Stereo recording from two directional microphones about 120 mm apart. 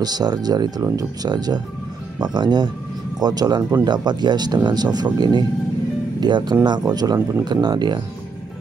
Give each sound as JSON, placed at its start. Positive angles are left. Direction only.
{"t": 0.0, "sound": "speech", "side_deg": -35}